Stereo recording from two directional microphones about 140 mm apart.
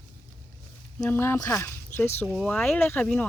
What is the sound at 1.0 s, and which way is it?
Speech, 15° left (ahead or behind).